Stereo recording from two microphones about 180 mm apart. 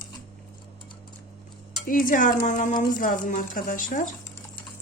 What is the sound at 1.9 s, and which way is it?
A woman's voice, 50° left (ahead or behind).